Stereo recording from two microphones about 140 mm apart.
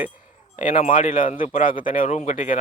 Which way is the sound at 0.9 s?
70° left (ahead or behind).